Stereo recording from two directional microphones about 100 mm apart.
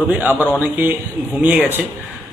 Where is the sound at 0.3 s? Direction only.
20° left (ahead or behind).